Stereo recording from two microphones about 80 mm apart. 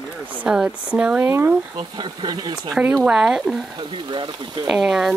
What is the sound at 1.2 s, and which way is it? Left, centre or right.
Speech, right.